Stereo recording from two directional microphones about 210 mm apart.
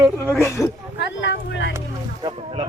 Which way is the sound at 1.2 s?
60° left (ahead or behind).